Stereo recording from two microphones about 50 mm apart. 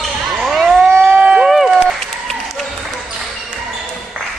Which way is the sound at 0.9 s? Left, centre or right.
Right.